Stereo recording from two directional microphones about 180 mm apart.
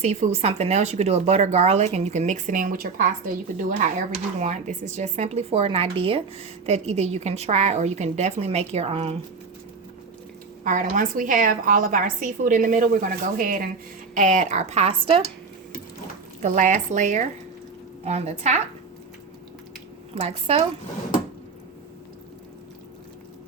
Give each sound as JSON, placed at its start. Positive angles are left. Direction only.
{"t": 0.0, "sound": "speech", "side_deg": -40}
{"t": 10.6, "sound": "a woman's voice", "side_deg": -45}
{"t": 16.4, "sound": "a woman's voice", "side_deg": -45}
{"t": 20.1, "sound": "speech", "side_deg": -35}